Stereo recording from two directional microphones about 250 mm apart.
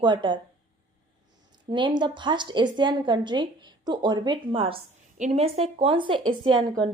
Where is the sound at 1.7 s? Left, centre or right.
Centre.